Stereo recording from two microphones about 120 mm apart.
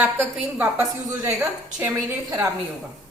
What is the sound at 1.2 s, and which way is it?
Speech, 30° right (ahead or behind).